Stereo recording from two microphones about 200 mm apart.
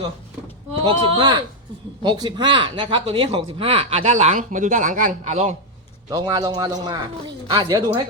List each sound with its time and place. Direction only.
0.7 s speech: 25° right (ahead or behind)
6.1 s speech: 20° right (ahead or behind)